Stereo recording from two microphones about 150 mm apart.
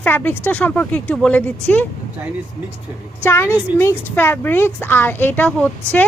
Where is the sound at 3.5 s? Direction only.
10° right (ahead or behind).